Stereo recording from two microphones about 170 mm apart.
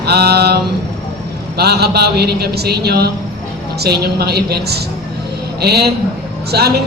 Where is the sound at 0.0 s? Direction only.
70° right (ahead or behind).